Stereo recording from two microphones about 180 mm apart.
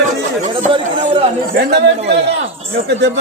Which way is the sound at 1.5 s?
65° right (ahead or behind).